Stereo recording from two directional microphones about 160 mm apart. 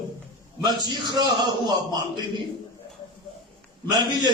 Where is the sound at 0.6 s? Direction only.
25° right (ahead or behind).